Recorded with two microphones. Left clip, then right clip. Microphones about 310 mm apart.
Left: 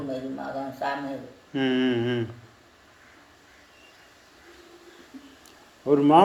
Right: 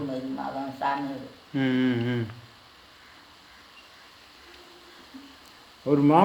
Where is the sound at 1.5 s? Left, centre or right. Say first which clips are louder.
Left 1 dB; centre.